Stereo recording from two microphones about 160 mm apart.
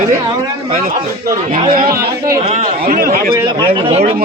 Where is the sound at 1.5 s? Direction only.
50° right (ahead or behind).